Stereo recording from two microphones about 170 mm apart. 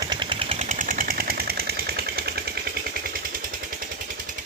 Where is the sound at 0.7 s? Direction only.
50° right (ahead or behind).